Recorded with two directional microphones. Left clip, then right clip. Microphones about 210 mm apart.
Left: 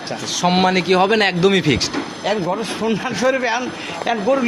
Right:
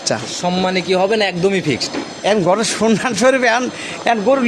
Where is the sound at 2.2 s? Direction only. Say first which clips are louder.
Right 7 dB; 55° right (ahead or behind).